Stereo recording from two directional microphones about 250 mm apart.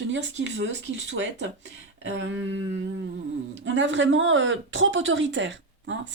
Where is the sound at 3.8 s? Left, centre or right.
Right.